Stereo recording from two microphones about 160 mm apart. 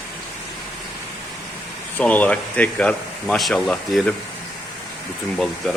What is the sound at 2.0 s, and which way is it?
Speech, 10° left (ahead or behind).